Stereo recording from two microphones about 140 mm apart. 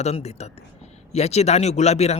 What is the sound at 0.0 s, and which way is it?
A man's voice, 50° left (ahead or behind).